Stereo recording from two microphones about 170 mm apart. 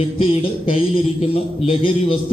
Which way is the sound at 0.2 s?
35° left (ahead or behind).